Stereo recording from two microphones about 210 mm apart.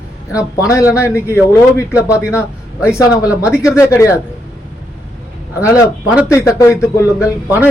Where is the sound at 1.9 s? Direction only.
5° right (ahead or behind).